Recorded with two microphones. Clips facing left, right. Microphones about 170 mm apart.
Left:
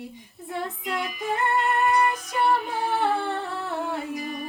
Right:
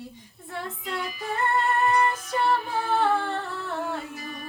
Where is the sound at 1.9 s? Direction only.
15° left (ahead or behind).